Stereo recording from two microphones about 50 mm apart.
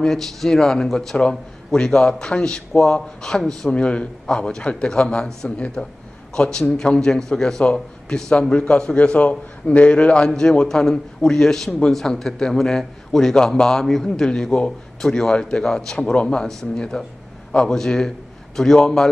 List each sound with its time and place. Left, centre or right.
0.0 s a man's voice: centre
3.7 s a man's voice: left